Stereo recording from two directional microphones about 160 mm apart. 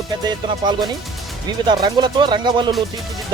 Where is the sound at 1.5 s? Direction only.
25° right (ahead or behind).